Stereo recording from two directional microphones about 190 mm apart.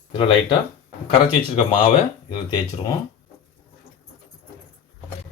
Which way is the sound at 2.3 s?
20° left (ahead or behind).